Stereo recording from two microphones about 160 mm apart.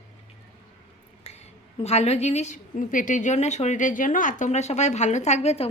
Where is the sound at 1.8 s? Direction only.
40° left (ahead or behind).